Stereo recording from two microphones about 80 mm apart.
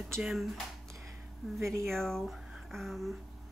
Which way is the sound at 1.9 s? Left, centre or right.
Centre.